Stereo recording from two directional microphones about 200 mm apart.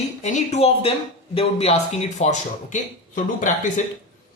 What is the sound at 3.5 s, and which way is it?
Speech, 40° left (ahead or behind).